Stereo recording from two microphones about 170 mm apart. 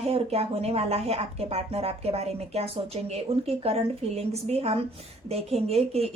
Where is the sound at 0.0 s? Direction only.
35° right (ahead or behind).